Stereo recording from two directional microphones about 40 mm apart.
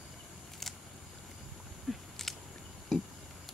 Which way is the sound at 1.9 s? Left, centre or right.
Centre.